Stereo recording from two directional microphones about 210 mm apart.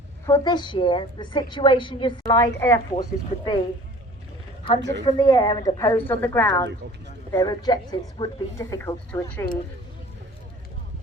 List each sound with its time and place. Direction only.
0.3 s a woman's voice: 15° left (ahead or behind)
4.8 s a woman's voice: 60° right (ahead or behind)
5.0 s speech: 20° left (ahead or behind)